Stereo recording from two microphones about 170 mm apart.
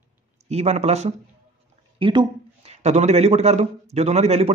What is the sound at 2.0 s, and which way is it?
A man's voice, 30° right (ahead or behind).